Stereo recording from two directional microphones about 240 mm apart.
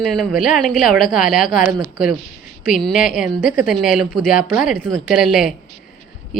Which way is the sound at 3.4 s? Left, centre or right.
Left.